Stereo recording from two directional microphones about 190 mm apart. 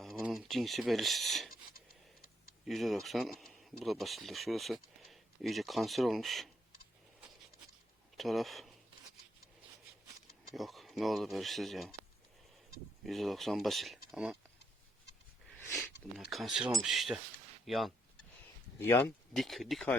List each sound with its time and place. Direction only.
0.0 s speech: centre (ahead or behind)
2.6 s speech: centre (ahead or behind)
8.1 s speech: centre (ahead or behind)
10.5 s speech: centre (ahead or behind)
13.1 s speech: centre (ahead or behind)
16.3 s speech: centre (ahead or behind)
18.8 s speech: 10° left (ahead or behind)
19.3 s speech: centre (ahead or behind)